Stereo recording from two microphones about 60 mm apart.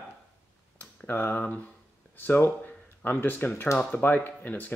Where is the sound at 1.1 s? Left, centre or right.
Left.